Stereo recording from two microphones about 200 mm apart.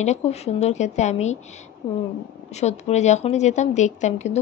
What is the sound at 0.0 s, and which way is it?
A woman's voice, 35° left (ahead or behind).